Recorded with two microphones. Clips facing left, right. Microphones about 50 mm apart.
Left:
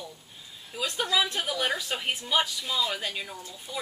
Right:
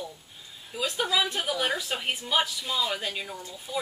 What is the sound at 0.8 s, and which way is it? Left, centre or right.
A woman's voice, centre.